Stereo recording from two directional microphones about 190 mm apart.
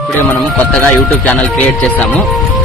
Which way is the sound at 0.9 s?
5° left (ahead or behind).